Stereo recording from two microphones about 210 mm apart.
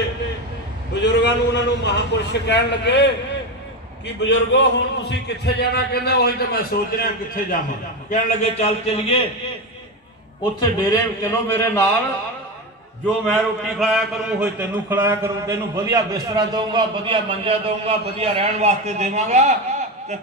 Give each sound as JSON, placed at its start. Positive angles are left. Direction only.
{"t": 1.0, "sound": "a man's voice", "side_deg": 55}
{"t": 4.2, "sound": "a man's voice", "side_deg": 55}
{"t": 8.1, "sound": "a man's voice", "side_deg": 30}
{"t": 10.6, "sound": "speech", "side_deg": 20}
{"t": 13.0, "sound": "a man's voice", "side_deg": 5}